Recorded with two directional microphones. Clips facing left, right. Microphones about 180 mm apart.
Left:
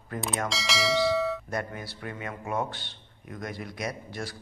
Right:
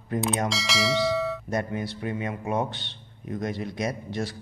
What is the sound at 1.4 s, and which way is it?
Speech, 20° right (ahead or behind).